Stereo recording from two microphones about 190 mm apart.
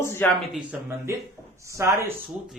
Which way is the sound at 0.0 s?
15° left (ahead or behind).